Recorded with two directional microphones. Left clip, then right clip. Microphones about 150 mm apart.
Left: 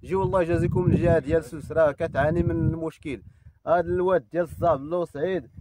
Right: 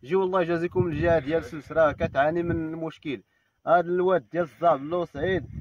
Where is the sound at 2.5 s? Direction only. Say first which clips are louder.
Left 2 dB; 20° left (ahead or behind).